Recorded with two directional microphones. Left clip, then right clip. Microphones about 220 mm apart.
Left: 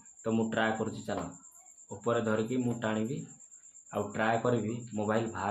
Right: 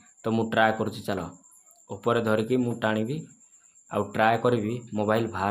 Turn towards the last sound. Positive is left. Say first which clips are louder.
# right 6 dB
turn(degrees=-45)  # may be behind; listen again after turning